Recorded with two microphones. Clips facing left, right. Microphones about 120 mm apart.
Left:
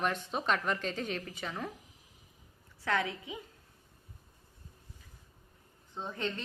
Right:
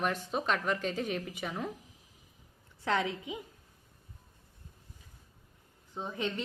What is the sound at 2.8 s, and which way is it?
Speech, 20° right (ahead or behind).